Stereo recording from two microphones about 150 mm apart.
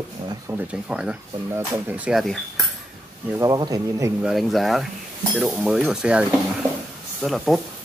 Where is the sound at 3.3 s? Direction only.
25° right (ahead or behind).